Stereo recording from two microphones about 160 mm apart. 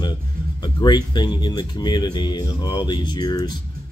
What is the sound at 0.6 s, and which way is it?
A man's voice, 25° left (ahead or behind).